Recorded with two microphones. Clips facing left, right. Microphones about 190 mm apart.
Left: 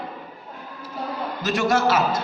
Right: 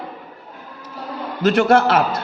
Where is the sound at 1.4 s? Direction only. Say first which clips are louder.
Right 7 dB; 60° right (ahead or behind).